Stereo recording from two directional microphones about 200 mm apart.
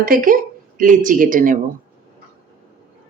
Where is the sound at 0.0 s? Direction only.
45° right (ahead or behind).